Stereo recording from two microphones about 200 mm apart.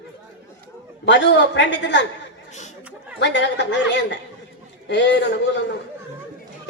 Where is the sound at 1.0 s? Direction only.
60° left (ahead or behind).